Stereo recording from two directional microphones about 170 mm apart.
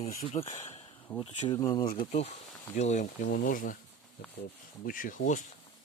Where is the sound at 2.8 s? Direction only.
45° left (ahead or behind).